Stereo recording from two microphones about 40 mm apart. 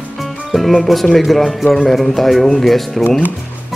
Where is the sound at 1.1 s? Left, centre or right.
Centre.